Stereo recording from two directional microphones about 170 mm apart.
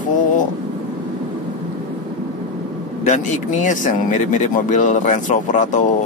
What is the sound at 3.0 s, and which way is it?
Speech, 45° left (ahead or behind).